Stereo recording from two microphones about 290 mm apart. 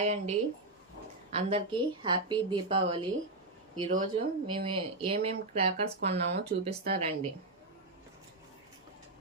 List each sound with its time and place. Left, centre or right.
0.0 s a woman's voice: right